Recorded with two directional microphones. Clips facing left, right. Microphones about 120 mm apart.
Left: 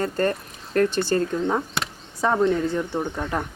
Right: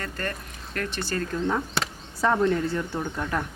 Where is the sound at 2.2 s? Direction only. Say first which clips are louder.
Left 2 dB; 15° left (ahead or behind).